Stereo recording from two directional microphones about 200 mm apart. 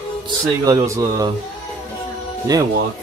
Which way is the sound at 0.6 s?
15° right (ahead or behind).